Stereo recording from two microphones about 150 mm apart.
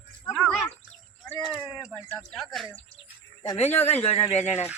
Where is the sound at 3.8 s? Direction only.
45° left (ahead or behind).